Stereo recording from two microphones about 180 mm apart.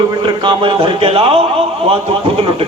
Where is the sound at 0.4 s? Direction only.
30° right (ahead or behind).